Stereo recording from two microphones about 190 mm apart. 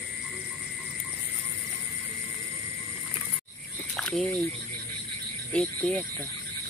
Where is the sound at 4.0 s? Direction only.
5° left (ahead or behind).